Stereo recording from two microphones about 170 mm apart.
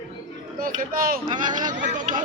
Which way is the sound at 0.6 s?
55° right (ahead or behind).